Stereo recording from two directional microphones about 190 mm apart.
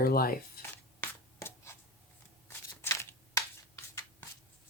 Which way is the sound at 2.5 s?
15° left (ahead or behind).